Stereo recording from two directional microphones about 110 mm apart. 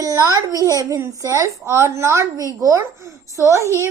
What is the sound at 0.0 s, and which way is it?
Speech, 25° right (ahead or behind).